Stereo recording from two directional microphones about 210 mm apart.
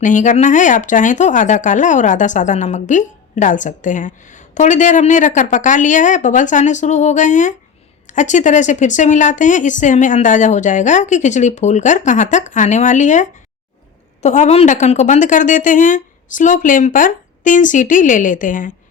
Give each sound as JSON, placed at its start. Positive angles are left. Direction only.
{"t": 0.0, "sound": "speech", "side_deg": 35}